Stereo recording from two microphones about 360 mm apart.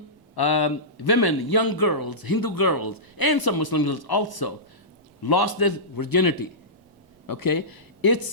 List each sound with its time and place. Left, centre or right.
0.3 s a man's voice: left